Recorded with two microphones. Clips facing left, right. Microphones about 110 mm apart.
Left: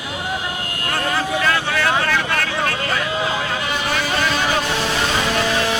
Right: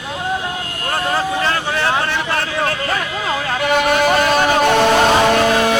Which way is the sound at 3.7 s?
60° right (ahead or behind).